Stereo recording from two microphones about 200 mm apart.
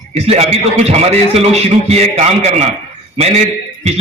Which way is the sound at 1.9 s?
35° right (ahead or behind).